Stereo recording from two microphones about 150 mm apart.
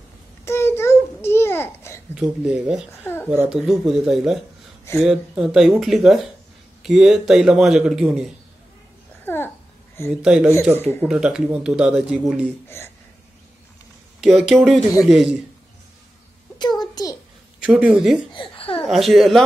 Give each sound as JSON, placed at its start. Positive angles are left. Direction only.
{"t": 0.5, "sound": "babbling", "side_deg": 15}
{"t": 2.1, "sound": "a man's voice", "side_deg": -5}
{"t": 3.0, "sound": "a sound", "side_deg": 15}
{"t": 3.3, "sound": "a man's voice", "side_deg": -5}
{"t": 9.2, "sound": "babbling", "side_deg": 15}
{"t": 10.2, "sound": "a man's voice", "side_deg": -5}
{"t": 12.6, "sound": "speech", "side_deg": 15}
{"t": 14.2, "sound": "a man's voice", "side_deg": -5}
{"t": 16.5, "sound": "a sound", "side_deg": 30}
{"t": 17.6, "sound": "speech", "side_deg": -10}
{"t": 18.3, "sound": "babbling", "side_deg": 35}
{"t": 18.9, "sound": "a man's voice", "side_deg": 0}